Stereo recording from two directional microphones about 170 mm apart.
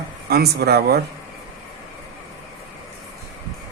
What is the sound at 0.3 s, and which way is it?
Speech, 70° right (ahead or behind).